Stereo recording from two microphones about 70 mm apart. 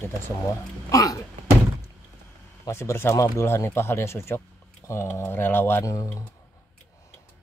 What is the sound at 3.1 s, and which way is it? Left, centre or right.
Speech, left.